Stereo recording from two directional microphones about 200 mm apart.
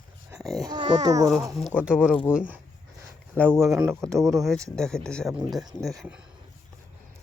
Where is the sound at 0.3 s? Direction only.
Centre (ahead or behind).